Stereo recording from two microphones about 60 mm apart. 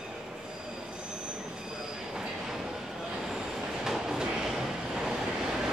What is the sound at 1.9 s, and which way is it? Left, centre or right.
Train, centre.